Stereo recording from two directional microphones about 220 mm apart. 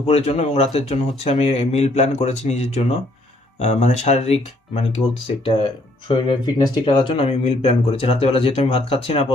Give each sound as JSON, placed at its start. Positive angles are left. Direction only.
{"t": 0.0, "sound": "speech", "side_deg": 25}
{"t": 6.1, "sound": "speech", "side_deg": 20}